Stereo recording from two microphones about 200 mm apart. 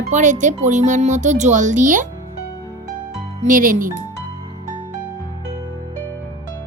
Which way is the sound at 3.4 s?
40° right (ahead or behind).